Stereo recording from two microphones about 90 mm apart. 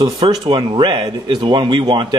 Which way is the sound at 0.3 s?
60° right (ahead or behind).